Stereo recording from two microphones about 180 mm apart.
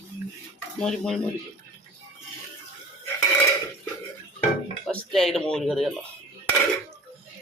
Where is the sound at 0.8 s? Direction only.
5° left (ahead or behind).